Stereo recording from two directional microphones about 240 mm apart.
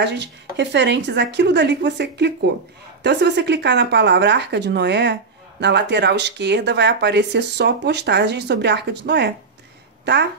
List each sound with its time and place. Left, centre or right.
0.0 s speech: right